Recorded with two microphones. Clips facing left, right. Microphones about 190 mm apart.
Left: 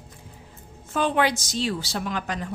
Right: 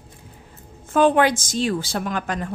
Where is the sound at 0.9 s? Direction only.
50° right (ahead or behind).